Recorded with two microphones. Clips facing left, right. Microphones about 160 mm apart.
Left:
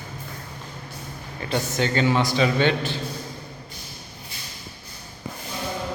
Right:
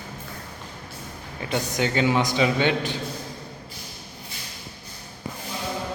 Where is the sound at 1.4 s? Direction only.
15° right (ahead or behind).